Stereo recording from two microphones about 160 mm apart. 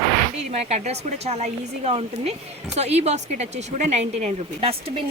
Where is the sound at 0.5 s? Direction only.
40° right (ahead or behind).